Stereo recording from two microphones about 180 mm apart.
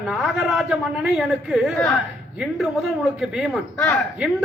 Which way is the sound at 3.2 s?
Centre (ahead or behind).